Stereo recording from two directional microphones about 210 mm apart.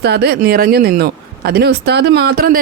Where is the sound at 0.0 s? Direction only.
50° right (ahead or behind).